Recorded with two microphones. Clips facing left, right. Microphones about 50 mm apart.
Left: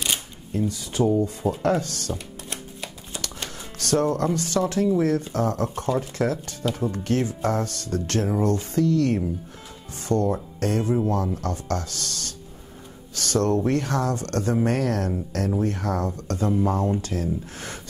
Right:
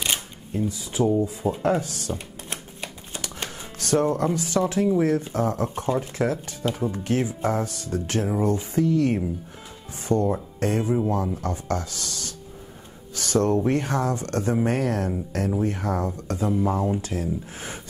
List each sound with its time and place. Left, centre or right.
0.0 s shuffling cards: centre
0.7 s speech: centre
2.8 s music: right
3.9 s speech: centre
12.1 s music: right
13.7 s speech: right